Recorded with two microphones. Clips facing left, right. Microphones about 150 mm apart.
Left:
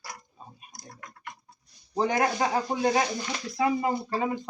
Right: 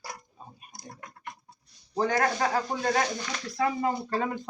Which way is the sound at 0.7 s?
30° right (ahead or behind).